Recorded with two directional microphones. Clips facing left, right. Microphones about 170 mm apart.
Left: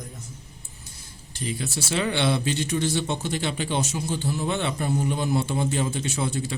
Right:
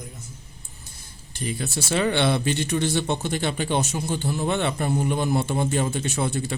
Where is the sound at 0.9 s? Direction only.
55° right (ahead or behind).